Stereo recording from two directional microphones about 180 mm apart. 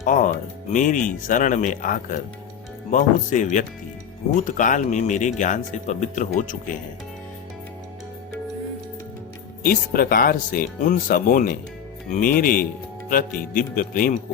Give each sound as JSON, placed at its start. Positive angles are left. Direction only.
{"t": 0.0, "sound": "speech", "side_deg": 45}
{"t": 9.6, "sound": "speech", "side_deg": 55}